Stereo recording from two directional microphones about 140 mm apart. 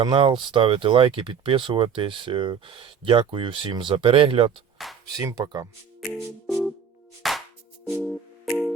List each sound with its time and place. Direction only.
0.0 s speech: 35° right (ahead or behind)
5.0 s speech: 25° right (ahead or behind)
6.1 s music: centre (ahead or behind)